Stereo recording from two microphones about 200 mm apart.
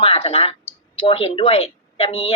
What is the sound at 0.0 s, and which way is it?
A woman's voice, 30° left (ahead or behind).